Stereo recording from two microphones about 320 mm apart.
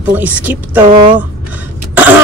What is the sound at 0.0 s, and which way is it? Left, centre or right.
Speech, centre.